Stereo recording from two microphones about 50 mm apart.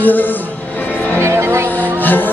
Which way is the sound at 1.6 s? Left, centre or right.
Left.